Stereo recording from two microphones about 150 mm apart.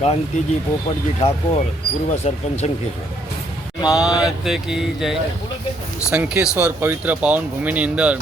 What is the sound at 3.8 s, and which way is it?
Speech, 25° left (ahead or behind).